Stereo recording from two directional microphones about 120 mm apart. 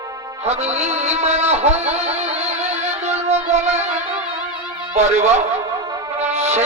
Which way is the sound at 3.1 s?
65° right (ahead or behind).